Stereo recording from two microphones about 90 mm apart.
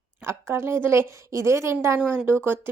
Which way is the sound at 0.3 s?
30° right (ahead or behind).